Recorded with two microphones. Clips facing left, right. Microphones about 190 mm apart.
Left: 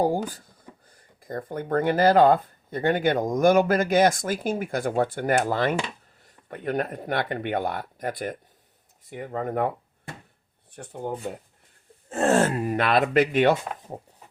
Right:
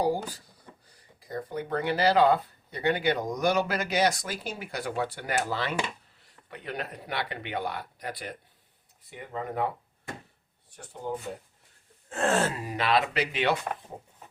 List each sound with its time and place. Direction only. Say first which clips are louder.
0.0 s speech: left 4 dB; 50° left (ahead or behind)
12.3 s speech: left 8 dB; 55° left (ahead or behind)